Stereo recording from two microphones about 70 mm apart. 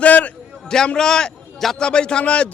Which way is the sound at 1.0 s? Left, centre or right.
Centre.